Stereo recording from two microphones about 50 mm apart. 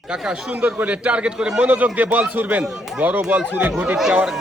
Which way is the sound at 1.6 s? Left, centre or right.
Right.